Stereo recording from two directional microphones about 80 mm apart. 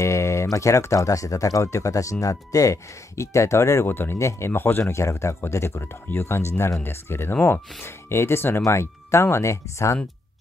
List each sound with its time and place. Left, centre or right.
0.0 s speech: left